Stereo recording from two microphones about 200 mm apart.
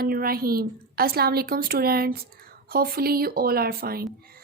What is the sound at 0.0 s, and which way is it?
Speech, 45° right (ahead or behind).